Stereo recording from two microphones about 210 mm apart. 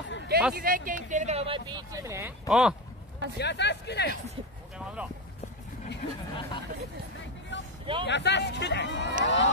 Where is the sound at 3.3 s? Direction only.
55° left (ahead or behind).